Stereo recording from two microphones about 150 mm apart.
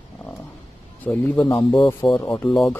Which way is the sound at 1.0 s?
10° left (ahead or behind).